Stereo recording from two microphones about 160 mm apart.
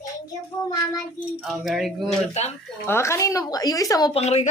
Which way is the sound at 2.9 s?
15° left (ahead or behind).